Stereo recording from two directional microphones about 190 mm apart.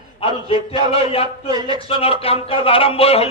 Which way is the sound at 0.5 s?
30° left (ahead or behind).